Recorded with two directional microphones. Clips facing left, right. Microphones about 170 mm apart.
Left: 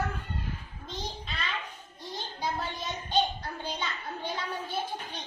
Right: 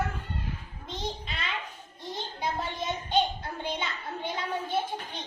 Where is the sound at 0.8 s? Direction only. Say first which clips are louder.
Right 3 dB; 20° right (ahead or behind).